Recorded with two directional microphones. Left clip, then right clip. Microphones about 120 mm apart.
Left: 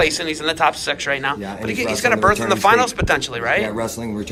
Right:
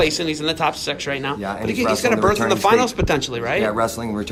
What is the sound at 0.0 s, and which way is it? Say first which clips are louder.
Speech: left 1 dB; 35° right (ahead or behind).